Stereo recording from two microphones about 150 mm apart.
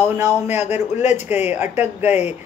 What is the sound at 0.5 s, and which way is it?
Speech, 50° left (ahead or behind).